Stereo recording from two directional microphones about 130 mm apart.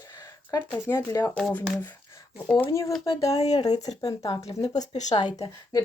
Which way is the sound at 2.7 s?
25° left (ahead or behind).